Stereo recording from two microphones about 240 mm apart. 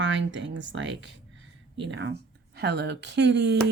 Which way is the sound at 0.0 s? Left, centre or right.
Right.